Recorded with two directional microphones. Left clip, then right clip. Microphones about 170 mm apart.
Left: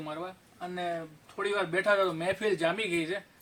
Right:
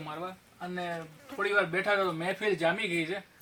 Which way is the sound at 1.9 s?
15° left (ahead or behind).